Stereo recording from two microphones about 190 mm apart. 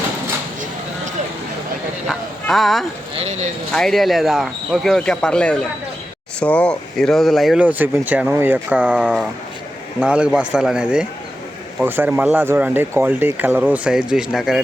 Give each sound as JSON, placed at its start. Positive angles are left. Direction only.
{"t": 2.0, "sound": "bow-wow", "side_deg": 0}
{"t": 3.2, "sound": "speech", "side_deg": -35}
{"t": 3.7, "sound": "speech", "side_deg": 0}